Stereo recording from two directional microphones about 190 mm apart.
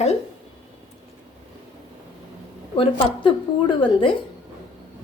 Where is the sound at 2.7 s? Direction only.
25° left (ahead or behind).